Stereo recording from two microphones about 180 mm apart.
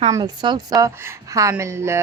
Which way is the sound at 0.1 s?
20° right (ahead or behind).